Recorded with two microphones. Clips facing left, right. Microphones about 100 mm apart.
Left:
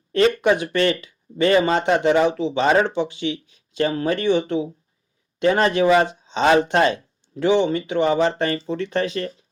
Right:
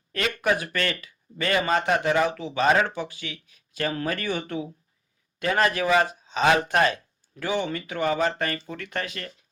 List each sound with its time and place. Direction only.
0.1 s speech: 35° left (ahead or behind)